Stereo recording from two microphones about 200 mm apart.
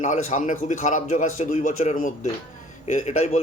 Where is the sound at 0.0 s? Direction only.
35° left (ahead or behind).